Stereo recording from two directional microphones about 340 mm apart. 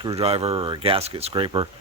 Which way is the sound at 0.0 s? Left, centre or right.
Centre.